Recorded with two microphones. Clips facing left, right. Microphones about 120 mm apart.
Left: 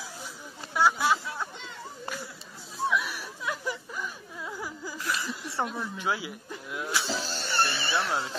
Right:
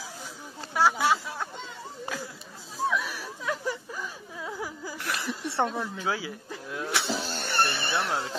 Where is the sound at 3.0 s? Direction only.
40° right (ahead or behind).